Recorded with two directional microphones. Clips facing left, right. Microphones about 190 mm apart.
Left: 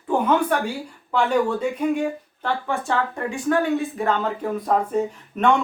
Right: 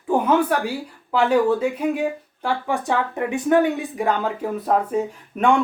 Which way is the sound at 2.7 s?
15° right (ahead or behind).